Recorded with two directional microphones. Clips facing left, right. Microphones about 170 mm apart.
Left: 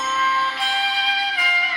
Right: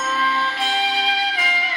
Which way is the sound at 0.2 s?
30° right (ahead or behind).